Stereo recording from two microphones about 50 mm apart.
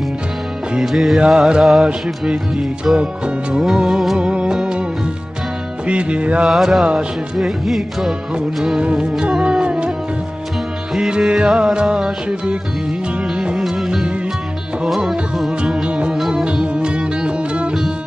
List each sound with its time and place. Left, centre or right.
0.7 s music: centre
1.1 s music: centre
4.2 s music: centre
5.9 s music: right
6.4 s music: centre
8.7 s music: centre
11.0 s music: centre
13.6 s music: centre
15.0 s music: centre
15.6 s music: centre
16.2 s music: centre
16.4 s music: centre